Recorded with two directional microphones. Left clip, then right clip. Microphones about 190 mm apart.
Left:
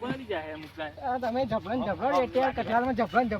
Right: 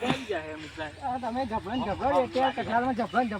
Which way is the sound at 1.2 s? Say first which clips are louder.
Left 2 dB; 30° left (ahead or behind).